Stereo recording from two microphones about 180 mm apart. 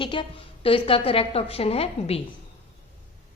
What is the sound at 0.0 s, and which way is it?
A woman's voice, 30° left (ahead or behind).